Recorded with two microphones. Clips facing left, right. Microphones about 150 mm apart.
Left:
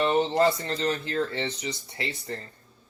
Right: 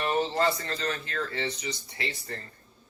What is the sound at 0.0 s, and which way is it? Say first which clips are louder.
Speech: left 4 dB; 25° left (ahead or behind).